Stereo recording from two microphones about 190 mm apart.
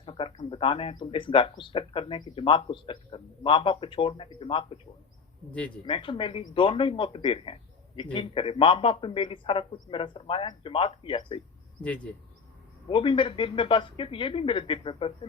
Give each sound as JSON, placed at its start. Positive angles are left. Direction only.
{"t": 0.0, "sound": "speech", "side_deg": 25}
{"t": 5.5, "sound": "speech", "side_deg": 5}
{"t": 5.8, "sound": "speech", "side_deg": 25}
{"t": 12.9, "sound": "speech", "side_deg": 25}